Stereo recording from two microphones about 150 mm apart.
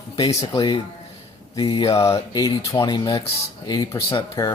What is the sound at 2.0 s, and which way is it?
Speech, 20° left (ahead or behind).